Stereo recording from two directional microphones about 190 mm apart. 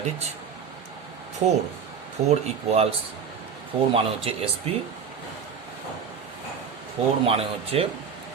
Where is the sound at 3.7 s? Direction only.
30° right (ahead or behind).